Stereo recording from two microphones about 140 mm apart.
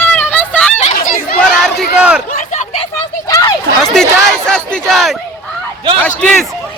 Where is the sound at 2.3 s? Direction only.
60° left (ahead or behind).